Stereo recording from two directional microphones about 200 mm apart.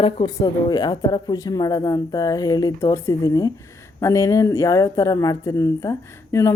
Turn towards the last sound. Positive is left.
turn(degrees=15)  # may be behind; listen again after turning